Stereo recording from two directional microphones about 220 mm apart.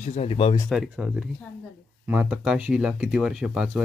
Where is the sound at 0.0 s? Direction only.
30° left (ahead or behind).